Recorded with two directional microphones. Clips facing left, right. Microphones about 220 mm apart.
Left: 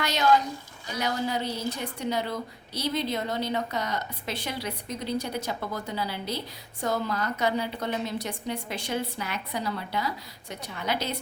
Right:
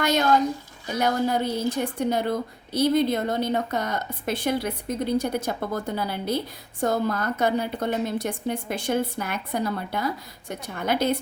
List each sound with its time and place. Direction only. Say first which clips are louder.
0.0 s a woman's voice: right 3 dB; 50° right (ahead or behind)